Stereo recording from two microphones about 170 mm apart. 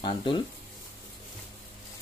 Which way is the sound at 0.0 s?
30° left (ahead or behind).